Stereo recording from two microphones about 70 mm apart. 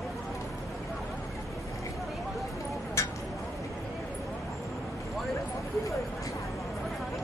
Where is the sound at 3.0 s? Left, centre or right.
Left.